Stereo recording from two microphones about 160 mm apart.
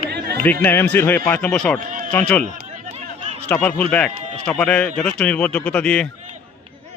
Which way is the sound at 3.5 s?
10° left (ahead or behind).